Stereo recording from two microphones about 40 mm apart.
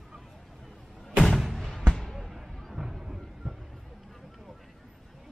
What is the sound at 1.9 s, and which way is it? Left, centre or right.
Basketball bounce, centre.